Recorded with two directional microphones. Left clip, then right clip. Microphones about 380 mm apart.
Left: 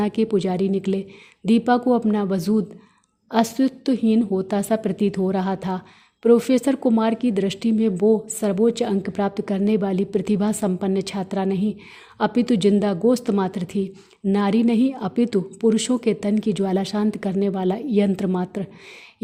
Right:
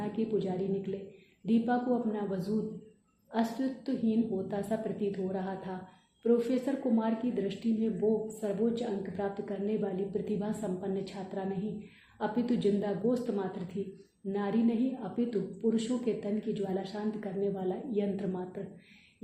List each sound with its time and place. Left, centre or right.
0.0 s a woman's voice: left